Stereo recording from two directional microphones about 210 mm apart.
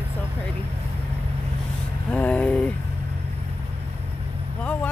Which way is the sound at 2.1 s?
5° left (ahead or behind).